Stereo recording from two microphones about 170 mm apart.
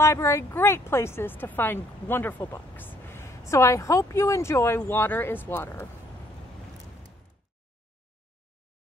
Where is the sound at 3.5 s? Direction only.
15° left (ahead or behind).